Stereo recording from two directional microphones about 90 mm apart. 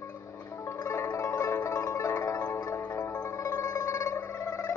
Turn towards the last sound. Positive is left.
turn(degrees=30)  # may be behind; listen again after turning